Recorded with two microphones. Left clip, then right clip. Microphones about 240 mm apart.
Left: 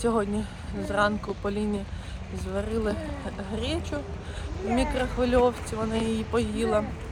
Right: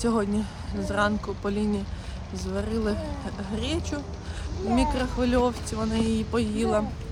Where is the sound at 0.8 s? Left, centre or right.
Centre.